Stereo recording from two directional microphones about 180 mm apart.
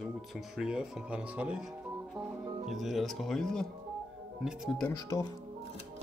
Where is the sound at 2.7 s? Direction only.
Centre (ahead or behind).